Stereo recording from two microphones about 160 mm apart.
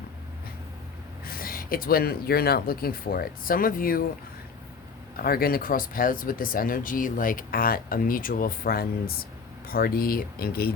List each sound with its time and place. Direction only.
1.2 s speech: 65° left (ahead or behind)
5.1 s speech: 70° left (ahead or behind)